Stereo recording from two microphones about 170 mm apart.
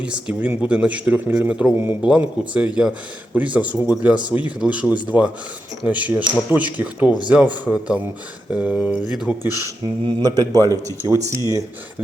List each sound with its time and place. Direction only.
0.0 s a man's voice: 5° right (ahead or behind)
9.6 s speech: 25° right (ahead or behind)